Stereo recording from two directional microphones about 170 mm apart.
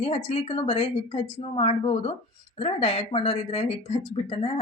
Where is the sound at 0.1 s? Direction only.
35° left (ahead or behind).